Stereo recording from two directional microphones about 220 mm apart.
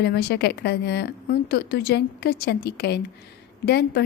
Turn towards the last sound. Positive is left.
turn(degrees=45)  # may be behind; listen again after turning